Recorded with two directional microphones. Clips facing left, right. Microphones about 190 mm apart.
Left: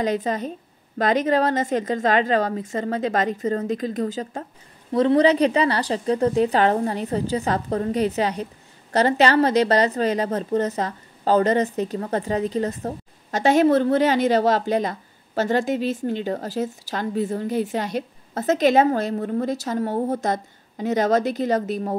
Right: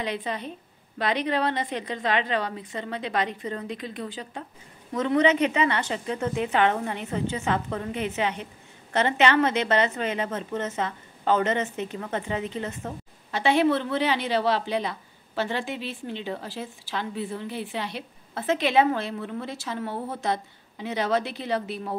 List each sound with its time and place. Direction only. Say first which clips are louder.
0.0 s a woman's voice: left 7 dB; 45° left (ahead or behind)